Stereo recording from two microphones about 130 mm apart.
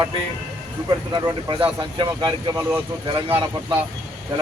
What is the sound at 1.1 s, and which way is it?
Speech, 35° right (ahead or behind).